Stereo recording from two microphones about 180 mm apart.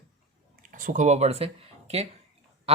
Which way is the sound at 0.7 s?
45° right (ahead or behind).